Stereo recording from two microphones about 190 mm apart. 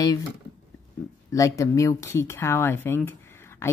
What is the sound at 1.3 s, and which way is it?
Speech, 15° left (ahead or behind).